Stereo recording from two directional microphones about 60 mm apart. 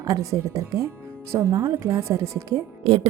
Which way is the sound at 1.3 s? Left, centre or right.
Right.